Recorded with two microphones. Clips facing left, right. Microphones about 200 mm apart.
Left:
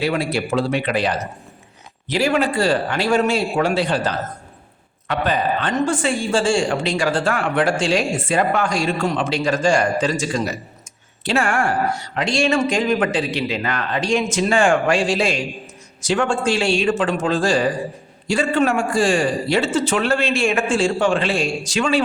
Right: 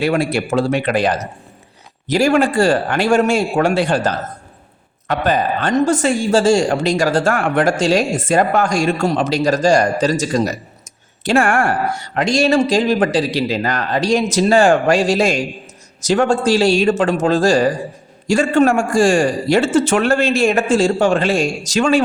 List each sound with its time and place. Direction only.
0.0 s speech: 50° right (ahead or behind)
12.1 s speech: 45° right (ahead or behind)